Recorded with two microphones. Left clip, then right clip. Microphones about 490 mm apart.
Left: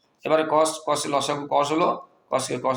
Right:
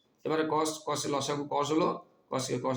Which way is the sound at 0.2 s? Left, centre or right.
Right.